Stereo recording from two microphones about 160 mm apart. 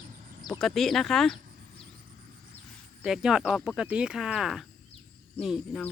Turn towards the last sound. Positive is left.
turn(degrees=0)  # may be behind; listen again after turning